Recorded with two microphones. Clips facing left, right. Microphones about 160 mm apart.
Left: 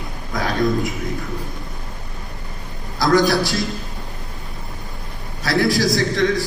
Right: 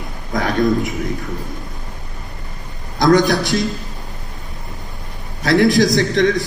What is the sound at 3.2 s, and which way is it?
Speech, 20° right (ahead or behind).